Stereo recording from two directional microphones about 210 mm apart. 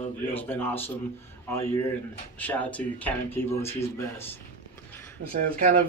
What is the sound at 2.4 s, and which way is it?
Speech, 5° left (ahead or behind).